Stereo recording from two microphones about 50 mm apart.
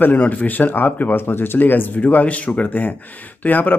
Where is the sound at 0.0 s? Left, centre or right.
Left.